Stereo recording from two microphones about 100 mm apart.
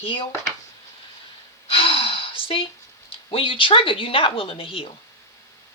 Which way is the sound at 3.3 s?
60° left (ahead or behind).